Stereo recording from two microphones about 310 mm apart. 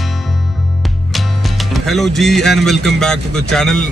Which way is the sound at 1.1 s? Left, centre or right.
Centre.